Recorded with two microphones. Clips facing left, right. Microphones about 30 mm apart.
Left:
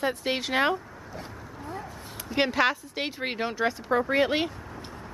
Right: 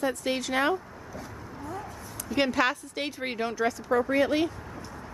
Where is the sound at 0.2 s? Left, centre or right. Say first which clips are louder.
Left 1 dB; left.